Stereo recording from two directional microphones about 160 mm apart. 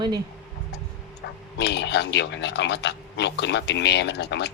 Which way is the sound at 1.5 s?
90° left.